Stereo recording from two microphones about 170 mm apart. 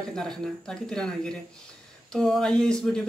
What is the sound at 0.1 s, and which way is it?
Speech, 5° left (ahead or behind).